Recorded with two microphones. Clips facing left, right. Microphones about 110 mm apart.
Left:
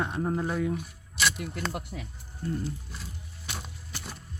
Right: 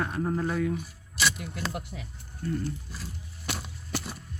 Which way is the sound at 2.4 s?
30° left (ahead or behind).